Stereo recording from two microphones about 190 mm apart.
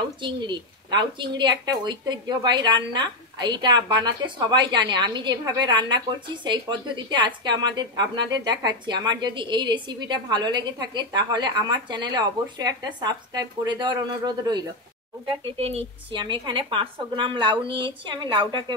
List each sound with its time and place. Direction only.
0.2 s speech: 25° right (ahead or behind)